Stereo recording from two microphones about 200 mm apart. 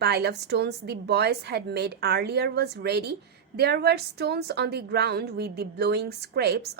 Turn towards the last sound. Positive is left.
turn(degrees=-55)  # may be behind; listen again after turning